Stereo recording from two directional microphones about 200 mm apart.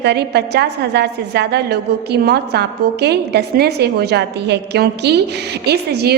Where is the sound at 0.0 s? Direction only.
55° right (ahead or behind).